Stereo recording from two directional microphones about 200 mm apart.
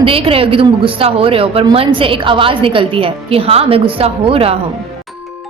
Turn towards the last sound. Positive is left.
turn(degrees=-30)  # may be behind; listen again after turning